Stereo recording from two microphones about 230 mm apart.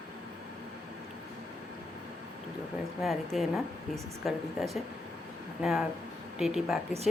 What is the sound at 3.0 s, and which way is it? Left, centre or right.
A woman's voice, centre.